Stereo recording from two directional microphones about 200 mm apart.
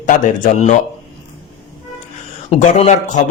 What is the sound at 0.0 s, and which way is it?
Speech, 40° left (ahead or behind).